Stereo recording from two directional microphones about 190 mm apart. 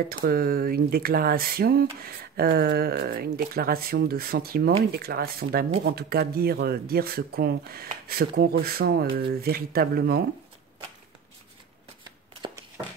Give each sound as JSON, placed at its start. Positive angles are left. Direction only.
{"t": 0.2, "sound": "speech", "side_deg": -50}